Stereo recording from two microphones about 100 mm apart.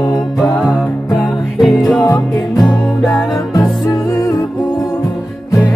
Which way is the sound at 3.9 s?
35° left (ahead or behind).